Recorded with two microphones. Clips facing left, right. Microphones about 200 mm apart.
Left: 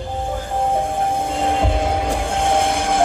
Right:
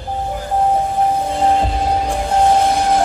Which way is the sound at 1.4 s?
55° left (ahead or behind).